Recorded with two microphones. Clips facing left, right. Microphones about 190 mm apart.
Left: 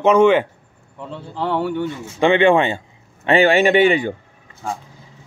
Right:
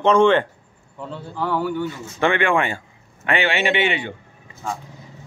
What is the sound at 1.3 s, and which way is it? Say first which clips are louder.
Speech: left 2 dB; 25° left (ahead or behind).